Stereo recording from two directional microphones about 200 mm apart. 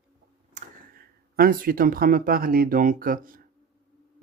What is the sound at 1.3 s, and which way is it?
Speech, 45° right (ahead or behind).